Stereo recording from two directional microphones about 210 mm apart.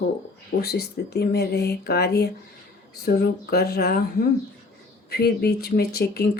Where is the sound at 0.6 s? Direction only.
50° left (ahead or behind).